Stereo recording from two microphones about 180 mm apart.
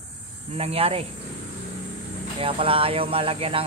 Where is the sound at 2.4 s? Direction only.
30° right (ahead or behind).